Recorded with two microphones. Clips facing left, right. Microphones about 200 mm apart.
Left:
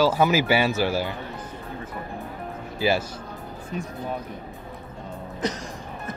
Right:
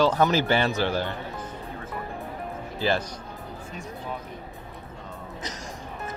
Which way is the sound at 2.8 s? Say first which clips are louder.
Left 3 dB; 10° left (ahead or behind).